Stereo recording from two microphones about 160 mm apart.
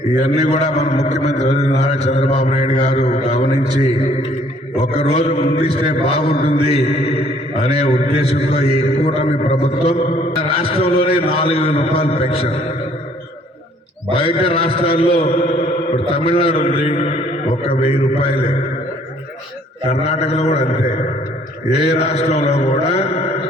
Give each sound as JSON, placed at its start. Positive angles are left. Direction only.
{"t": 0.2, "sound": "mantra", "side_deg": 45}
{"t": 4.8, "sound": "a man's voice", "side_deg": 40}
{"t": 6.4, "sound": "mantra", "side_deg": 40}
{"t": 10.4, "sound": "a man's voice", "side_deg": 35}
{"t": 14.1, "sound": "a man's voice", "side_deg": 35}
{"t": 19.9, "sound": "mantra", "side_deg": 40}
{"t": 21.8, "sound": "a man's voice", "side_deg": 40}